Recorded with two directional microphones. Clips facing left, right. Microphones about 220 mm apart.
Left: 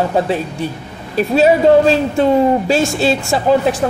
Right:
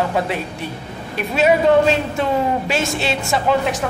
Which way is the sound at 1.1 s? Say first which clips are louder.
Left 5 dB; 35° left (ahead or behind).